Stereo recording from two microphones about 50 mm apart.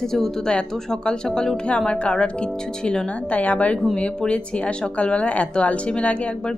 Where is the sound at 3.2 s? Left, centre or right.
Left.